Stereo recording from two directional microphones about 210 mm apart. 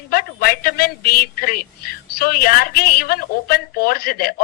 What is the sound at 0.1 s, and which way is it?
A man's voice, 45° left (ahead or behind).